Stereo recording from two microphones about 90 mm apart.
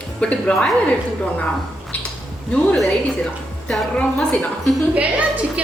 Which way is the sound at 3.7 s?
15° left (ahead or behind).